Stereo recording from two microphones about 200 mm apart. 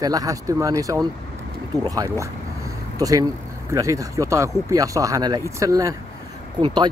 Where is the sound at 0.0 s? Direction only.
20° right (ahead or behind).